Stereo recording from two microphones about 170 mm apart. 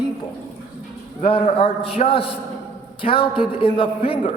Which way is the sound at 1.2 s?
35° left (ahead or behind).